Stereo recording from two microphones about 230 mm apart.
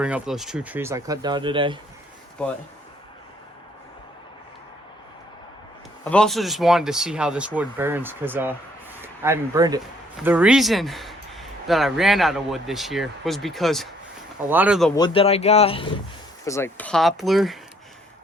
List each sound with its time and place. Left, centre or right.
0.0 s speech: centre; by 1.8 s right
6.1 s speech: centre
10.2 s speech: centre
14.9 s speech: left
16.5 s speech: centre